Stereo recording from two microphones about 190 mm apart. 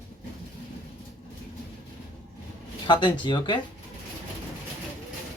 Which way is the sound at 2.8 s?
25° left (ahead or behind).